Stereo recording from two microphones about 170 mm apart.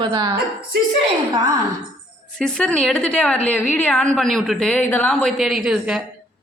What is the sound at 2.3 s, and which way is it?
A woman's voice, 5° left (ahead or behind).